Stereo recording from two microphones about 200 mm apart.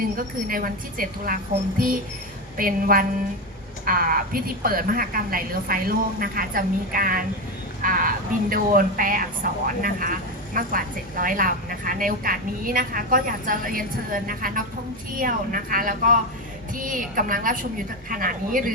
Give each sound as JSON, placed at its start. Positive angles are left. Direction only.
{"t": 0.0, "sound": "speech", "side_deg": -45}
{"t": 2.6, "sound": "speech", "side_deg": -45}